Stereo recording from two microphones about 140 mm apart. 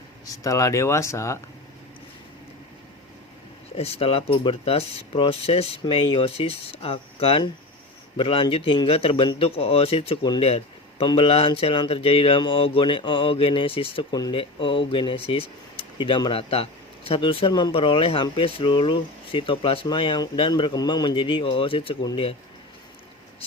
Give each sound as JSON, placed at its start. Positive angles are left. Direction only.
{"t": 0.3, "sound": "speech", "side_deg": 25}
{"t": 3.8, "sound": "a man's voice", "side_deg": 45}
{"t": 10.4, "sound": "a sound", "side_deg": 45}
{"t": 11.0, "sound": "speech", "side_deg": 35}